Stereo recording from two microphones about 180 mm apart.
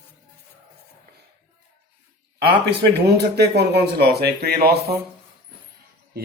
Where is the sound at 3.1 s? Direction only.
65° right (ahead or behind).